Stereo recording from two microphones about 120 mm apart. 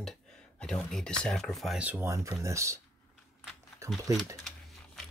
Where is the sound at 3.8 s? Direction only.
25° right (ahead or behind).